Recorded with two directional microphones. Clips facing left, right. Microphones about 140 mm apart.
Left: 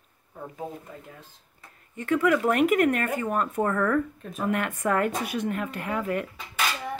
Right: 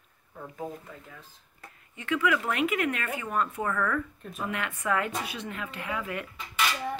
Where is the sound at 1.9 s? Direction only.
45° left (ahead or behind).